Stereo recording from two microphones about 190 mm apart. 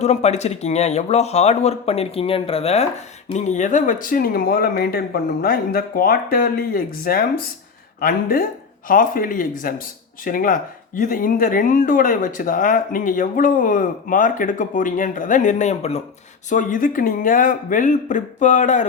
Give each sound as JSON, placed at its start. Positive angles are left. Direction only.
{"t": 0.0, "sound": "speech", "side_deg": 35}